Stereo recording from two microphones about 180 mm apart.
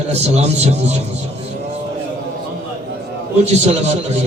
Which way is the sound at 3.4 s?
35° right (ahead or behind).